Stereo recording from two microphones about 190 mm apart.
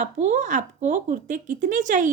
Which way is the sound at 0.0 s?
40° right (ahead or behind).